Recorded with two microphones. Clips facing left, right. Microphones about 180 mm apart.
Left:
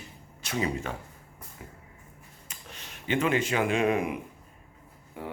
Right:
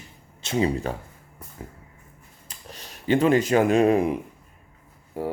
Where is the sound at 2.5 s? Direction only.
35° right (ahead or behind).